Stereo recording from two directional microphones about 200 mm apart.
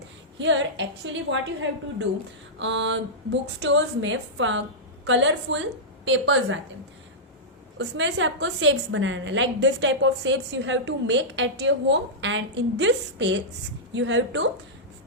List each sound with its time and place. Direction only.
0.3 s a woman's voice: 65° right (ahead or behind)
7.8 s a woman's voice: 70° right (ahead or behind)